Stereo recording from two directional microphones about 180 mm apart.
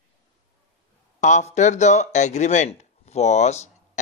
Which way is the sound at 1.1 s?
40° left (ahead or behind).